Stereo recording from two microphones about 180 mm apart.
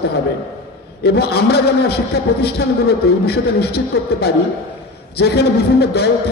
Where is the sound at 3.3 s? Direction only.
65° left (ahead or behind).